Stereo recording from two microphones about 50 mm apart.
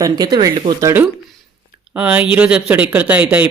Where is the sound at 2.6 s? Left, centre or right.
Right.